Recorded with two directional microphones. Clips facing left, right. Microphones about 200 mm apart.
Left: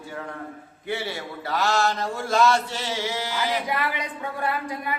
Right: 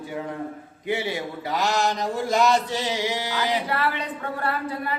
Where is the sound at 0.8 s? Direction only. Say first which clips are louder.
Right 3 dB; 15° right (ahead or behind).